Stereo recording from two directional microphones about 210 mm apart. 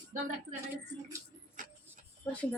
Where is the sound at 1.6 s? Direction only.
40° right (ahead or behind).